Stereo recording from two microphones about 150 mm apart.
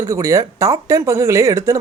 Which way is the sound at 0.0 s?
20° right (ahead or behind).